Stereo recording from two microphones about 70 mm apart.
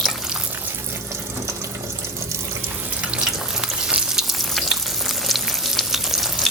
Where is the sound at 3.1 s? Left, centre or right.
Centre.